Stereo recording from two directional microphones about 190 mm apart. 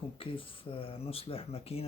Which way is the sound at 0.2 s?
30° left (ahead or behind).